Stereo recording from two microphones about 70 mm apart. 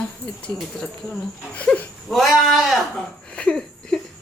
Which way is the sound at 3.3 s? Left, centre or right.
Centre.